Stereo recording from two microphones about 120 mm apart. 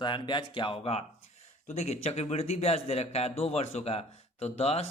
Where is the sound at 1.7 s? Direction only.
65° left (ahead or behind).